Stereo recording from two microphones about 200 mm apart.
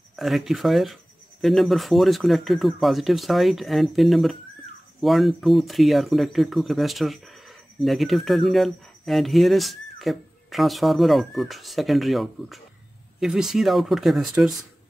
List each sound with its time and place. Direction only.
0.1 s speech: centre (ahead or behind)